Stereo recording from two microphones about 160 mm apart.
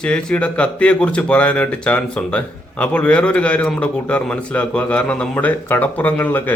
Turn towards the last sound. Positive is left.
turn(degrees=10)  # may be behind; listen again after turning